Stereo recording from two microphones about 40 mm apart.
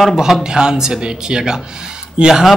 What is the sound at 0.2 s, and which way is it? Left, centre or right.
Speech, centre.